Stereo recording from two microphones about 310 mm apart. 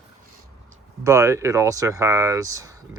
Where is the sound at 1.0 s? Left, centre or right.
Centre.